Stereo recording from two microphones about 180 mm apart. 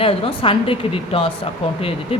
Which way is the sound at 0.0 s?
30° left (ahead or behind).